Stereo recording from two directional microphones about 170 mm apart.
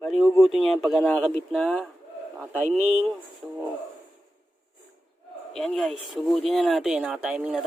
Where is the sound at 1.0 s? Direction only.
10° left (ahead or behind).